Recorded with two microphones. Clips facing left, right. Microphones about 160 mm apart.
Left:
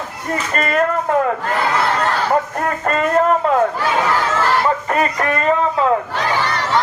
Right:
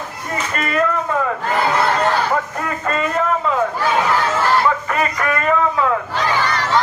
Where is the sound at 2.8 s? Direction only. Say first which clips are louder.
Left 4 dB; 45° left (ahead or behind).